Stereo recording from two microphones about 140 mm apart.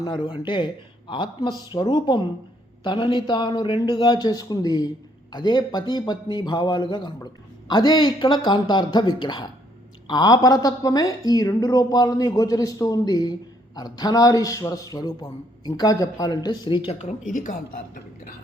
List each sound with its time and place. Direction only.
0.0 s a man's voice: 35° left (ahead or behind)
17.2 s a woman's voice: 65° left (ahead or behind)